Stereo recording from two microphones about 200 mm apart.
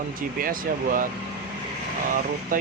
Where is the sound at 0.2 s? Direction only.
45° right (ahead or behind).